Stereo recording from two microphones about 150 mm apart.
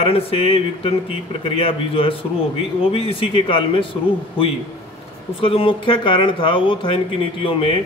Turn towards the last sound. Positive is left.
turn(degrees=35)  # may be behind; listen again after turning